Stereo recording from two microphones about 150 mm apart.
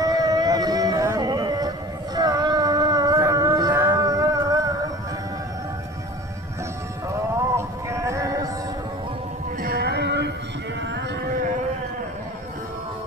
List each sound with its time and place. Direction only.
0.0 s music: 25° right (ahead or behind)
2.1 s a sound: 25° right (ahead or behind)
7.1 s music: 20° right (ahead or behind)
9.6 s music: 90° right